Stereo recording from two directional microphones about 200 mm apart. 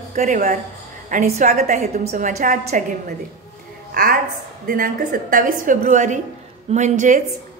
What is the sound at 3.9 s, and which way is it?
A woman's voice, 45° right (ahead or behind).